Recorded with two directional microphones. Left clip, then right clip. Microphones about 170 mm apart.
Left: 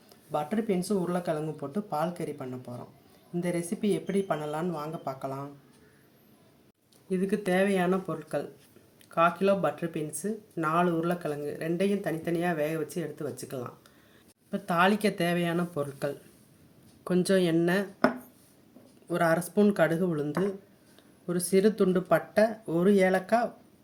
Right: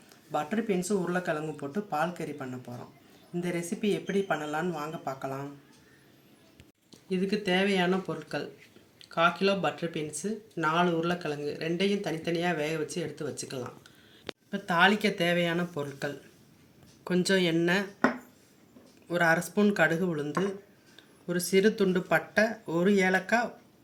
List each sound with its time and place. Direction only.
0.3 s speech: 35° left (ahead or behind)
7.1 s speech: 15° left (ahead or behind)
14.5 s speech: 35° left (ahead or behind)
19.0 s speech: 30° left (ahead or behind)